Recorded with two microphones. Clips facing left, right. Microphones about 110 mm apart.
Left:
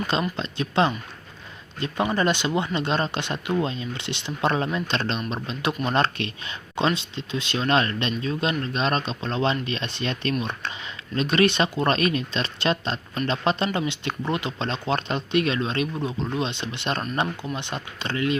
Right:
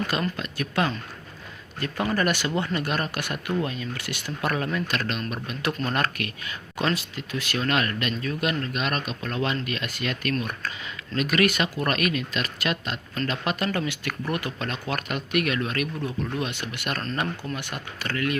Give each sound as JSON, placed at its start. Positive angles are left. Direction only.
{"t": 0.1, "sound": "speech", "side_deg": 25}